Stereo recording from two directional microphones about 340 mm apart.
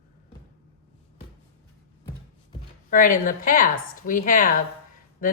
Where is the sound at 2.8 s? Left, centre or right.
Left.